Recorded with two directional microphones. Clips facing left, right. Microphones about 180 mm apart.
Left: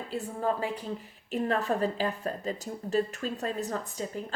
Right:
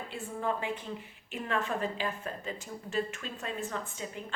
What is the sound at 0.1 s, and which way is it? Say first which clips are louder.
A woman's voice: left 4 dB; 40° left (ahead or behind).